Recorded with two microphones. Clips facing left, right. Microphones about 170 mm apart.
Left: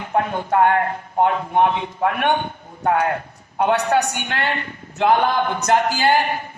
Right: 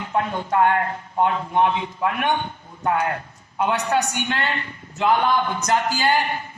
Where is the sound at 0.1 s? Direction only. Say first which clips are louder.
Left 3 dB; 50° left (ahead or behind).